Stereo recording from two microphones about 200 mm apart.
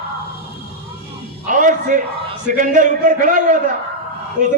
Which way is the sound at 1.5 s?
40° right (ahead or behind).